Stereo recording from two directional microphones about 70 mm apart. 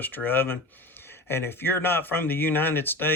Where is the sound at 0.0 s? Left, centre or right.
Left.